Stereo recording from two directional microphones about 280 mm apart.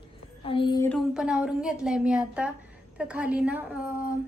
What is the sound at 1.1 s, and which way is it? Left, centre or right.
A woman's voice, centre.